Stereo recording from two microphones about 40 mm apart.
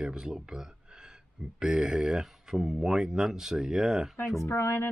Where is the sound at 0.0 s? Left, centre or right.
Centre.